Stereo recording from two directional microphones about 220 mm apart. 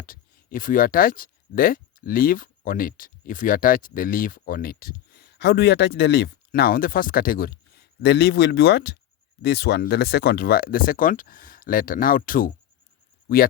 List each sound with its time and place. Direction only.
0.0 s speech: 40° left (ahead or behind)